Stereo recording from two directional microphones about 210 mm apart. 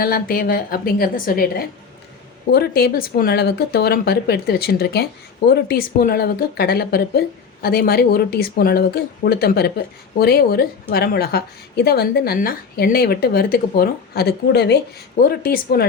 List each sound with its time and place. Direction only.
0.0 s speech: 45° left (ahead or behind)